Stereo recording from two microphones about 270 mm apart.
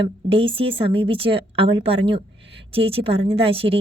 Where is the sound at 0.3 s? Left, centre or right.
Centre.